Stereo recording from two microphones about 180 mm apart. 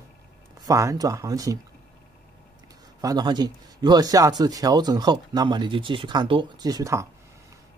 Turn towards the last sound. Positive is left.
turn(degrees=-15)  # may be behind; listen again after turning